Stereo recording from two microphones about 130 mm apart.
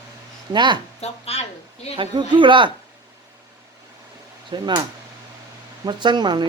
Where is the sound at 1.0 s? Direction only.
55° left (ahead or behind).